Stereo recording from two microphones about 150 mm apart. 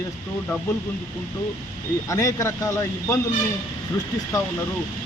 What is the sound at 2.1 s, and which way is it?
Speech, 20° left (ahead or behind).